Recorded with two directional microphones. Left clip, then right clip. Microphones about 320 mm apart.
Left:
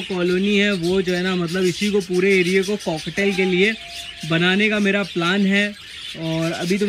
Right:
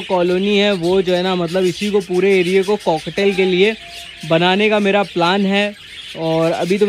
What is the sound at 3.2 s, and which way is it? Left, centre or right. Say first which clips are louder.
Speech: right 5 dB; centre.